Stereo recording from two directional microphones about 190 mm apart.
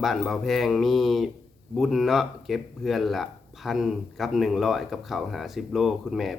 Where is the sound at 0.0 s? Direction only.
Centre (ahead or behind).